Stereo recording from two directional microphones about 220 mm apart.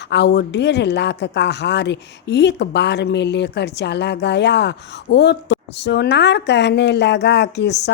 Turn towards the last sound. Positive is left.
turn(degrees=50)  # may be behind; listen again after turning